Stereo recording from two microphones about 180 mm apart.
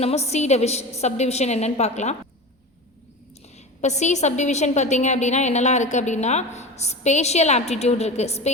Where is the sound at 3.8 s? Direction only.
40° left (ahead or behind).